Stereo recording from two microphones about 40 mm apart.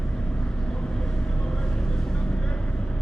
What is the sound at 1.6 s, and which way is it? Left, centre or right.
Vehicle, centre.